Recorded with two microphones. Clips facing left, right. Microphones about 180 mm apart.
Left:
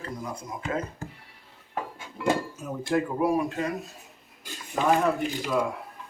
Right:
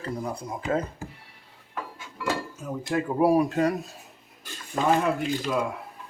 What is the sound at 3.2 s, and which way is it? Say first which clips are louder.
Speech: right 4 dB; 35° right (ahead or behind).